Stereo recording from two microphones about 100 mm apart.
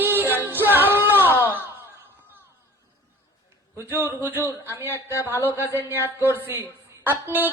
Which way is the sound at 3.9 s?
20° right (ahead or behind).